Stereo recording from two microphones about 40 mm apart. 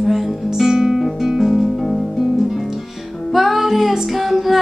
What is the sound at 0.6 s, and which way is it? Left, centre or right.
Music, centre.